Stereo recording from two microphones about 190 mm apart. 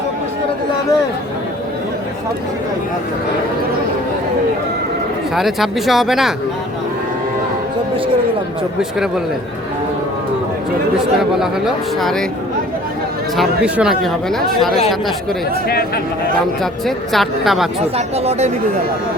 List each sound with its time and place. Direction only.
5.3 s speech: centre (ahead or behind)
8.8 s speech: centre (ahead or behind)
10.9 s speech: 5° right (ahead or behind)
13.3 s speech: 5° right (ahead or behind)
16.8 s speech: centre (ahead or behind)
17.9 s speech: 35° right (ahead or behind)